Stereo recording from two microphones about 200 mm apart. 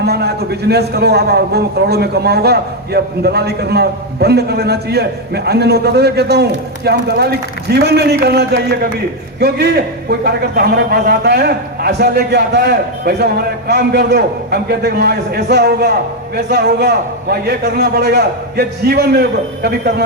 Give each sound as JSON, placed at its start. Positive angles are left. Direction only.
{"t": 0.0, "sound": "a man's voice", "side_deg": -55}